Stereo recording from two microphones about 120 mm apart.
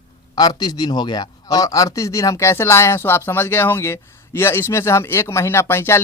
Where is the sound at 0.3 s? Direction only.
35° left (ahead or behind).